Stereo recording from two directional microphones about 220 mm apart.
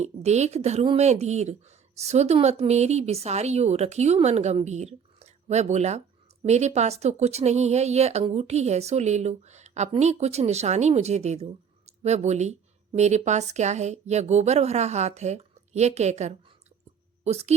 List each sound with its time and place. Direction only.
0.0 s a woman's voice: 30° right (ahead or behind)